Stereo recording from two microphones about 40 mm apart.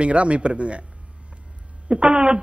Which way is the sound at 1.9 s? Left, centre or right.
Right.